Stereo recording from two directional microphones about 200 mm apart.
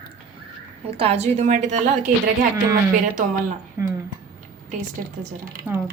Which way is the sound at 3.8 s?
15° right (ahead or behind).